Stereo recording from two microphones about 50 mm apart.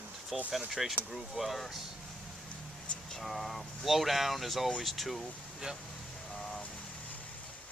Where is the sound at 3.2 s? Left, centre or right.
Centre.